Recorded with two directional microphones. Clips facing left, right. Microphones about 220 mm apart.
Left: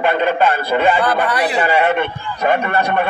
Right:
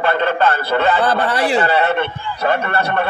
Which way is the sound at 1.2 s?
25° right (ahead or behind).